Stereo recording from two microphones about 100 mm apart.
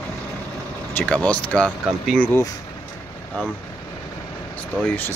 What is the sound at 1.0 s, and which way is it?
Speech, 10° left (ahead or behind).